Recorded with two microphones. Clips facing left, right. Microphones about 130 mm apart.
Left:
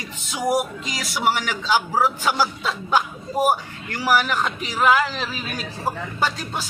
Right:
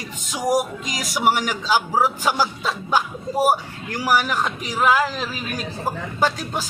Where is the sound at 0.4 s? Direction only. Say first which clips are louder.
Right 1 dB; 40° right (ahead or behind).